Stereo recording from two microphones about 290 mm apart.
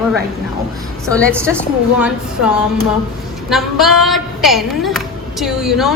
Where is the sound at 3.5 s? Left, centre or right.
Centre.